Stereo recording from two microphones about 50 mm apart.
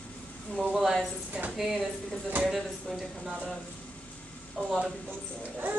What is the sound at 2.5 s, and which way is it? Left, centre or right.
Speech, centre.